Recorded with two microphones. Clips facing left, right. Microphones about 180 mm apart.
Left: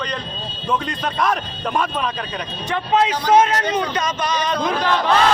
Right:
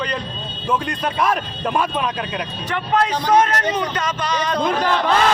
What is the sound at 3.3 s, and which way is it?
Speech, 10° left (ahead or behind).